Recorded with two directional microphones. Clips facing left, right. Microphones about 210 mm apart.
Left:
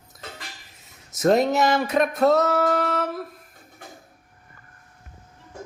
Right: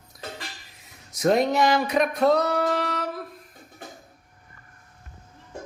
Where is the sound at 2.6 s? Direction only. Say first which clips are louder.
Left 3 dB; 50° left (ahead or behind).